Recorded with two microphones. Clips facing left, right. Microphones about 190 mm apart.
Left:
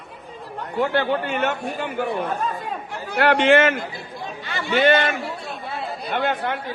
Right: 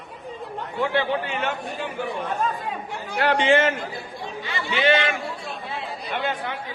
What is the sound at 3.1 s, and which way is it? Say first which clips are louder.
Speech: left 3 dB; 65° left (ahead or behind).